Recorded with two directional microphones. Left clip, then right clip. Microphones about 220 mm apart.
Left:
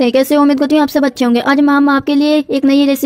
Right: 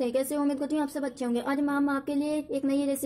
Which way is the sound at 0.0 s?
35° left (ahead or behind).